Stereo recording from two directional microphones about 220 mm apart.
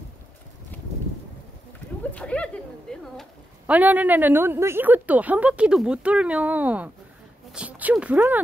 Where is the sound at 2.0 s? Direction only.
5° left (ahead or behind).